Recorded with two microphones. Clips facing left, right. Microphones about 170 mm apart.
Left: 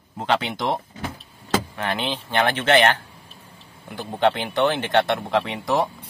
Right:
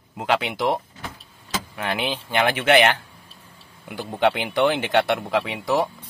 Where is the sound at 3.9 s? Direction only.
15° right (ahead or behind).